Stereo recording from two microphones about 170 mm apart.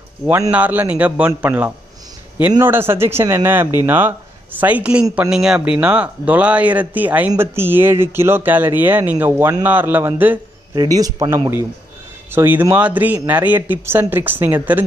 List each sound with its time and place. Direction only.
0.3 s speech: 10° right (ahead or behind)
10.7 s speech: 25° right (ahead or behind)